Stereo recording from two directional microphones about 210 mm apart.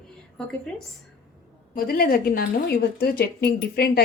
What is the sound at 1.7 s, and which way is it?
A woman's voice, 45° left (ahead or behind).